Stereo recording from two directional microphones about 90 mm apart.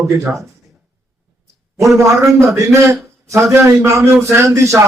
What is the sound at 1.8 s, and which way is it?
A man's voice, 35° right (ahead or behind).